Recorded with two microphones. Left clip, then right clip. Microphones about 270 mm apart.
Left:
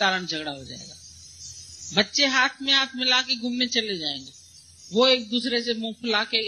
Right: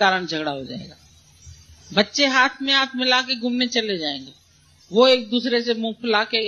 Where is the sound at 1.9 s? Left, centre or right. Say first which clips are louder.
Right 3 dB; left.